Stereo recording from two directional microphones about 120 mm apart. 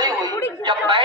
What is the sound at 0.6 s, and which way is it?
Speech, 40° right (ahead or behind).